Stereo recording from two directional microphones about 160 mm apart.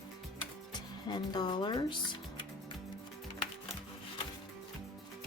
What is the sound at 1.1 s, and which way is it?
Speech, 25° left (ahead or behind).